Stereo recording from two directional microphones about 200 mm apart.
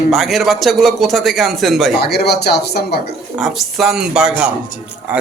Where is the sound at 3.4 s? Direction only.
Centre (ahead or behind).